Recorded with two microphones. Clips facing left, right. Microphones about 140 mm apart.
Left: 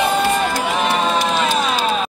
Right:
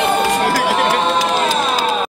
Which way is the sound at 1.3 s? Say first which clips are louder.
Right 1 dB; 40° right (ahead or behind).